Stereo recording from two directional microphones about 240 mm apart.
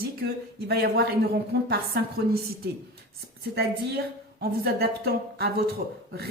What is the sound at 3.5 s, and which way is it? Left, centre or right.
A woman's voice, right.